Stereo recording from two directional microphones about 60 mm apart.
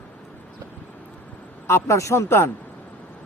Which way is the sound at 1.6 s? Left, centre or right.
Left.